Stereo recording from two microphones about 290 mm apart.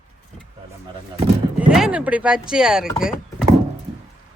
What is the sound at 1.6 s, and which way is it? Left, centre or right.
Speech, centre.